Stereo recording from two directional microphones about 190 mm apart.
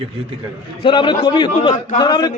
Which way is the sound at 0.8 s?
25° left (ahead or behind).